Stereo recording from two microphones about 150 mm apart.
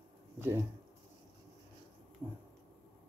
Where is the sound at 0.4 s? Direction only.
15° right (ahead or behind).